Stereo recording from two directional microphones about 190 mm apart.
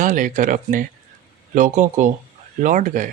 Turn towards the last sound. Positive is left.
turn(degrees=-40)  # may be behind; listen again after turning